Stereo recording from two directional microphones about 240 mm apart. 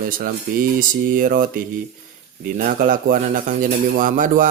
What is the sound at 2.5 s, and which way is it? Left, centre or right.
Speech, right.